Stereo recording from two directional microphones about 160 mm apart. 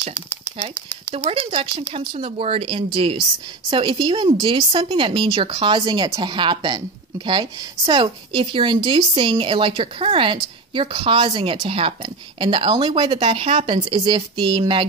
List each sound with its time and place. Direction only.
1.1 s speech: 35° right (ahead or behind)